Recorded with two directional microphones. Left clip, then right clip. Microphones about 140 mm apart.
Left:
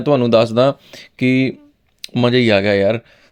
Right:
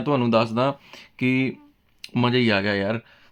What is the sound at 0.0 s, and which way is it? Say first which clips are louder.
Speech: left 8 dB; 40° left (ahead or behind).